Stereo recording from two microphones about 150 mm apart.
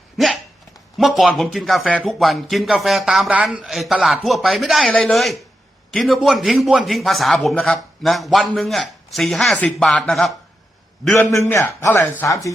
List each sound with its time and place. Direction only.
0.9 s speech: centre (ahead or behind)
11.2 s a man's voice: 15° left (ahead or behind)